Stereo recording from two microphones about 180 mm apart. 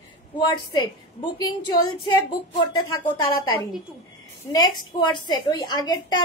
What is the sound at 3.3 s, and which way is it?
A woman's voice, 20° left (ahead or behind).